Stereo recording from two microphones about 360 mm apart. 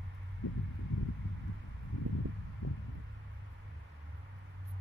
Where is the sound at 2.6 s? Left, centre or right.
Left.